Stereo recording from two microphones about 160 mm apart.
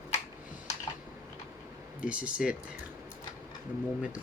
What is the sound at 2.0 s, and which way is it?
Speech, 5° right (ahead or behind).